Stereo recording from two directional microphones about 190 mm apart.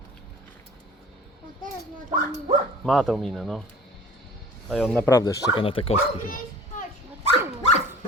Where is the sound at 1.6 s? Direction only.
40° right (ahead or behind).